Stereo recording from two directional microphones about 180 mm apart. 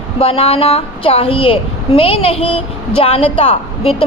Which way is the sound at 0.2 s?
30° left (ahead or behind).